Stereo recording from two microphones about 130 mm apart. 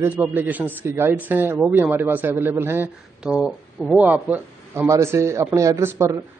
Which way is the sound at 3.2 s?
5° right (ahead or behind).